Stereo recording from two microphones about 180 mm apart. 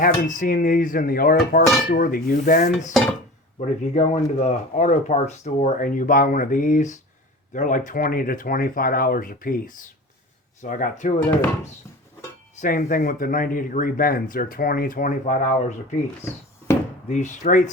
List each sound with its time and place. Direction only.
0.0 s speech: 50° left (ahead or behind)
3.6 s speech: 40° left (ahead or behind)
12.5 s speech: 50° left (ahead or behind)
16.7 s a sound: 15° left (ahead or behind)
17.1 s speech: 45° left (ahead or behind)